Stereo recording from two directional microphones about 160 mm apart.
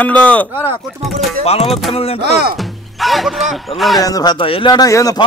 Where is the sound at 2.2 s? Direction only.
85° right.